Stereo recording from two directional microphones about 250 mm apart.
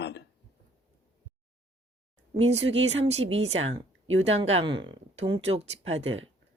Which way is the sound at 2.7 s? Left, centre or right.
Right.